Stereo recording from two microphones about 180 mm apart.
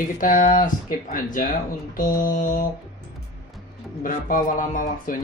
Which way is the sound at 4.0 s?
50° left (ahead or behind).